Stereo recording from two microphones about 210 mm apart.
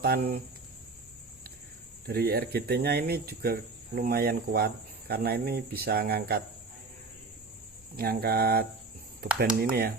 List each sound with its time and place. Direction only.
0.0 s speech: 45° right (ahead or behind)
2.0 s speech: 50° right (ahead or behind)
7.9 s speech: 45° right (ahead or behind)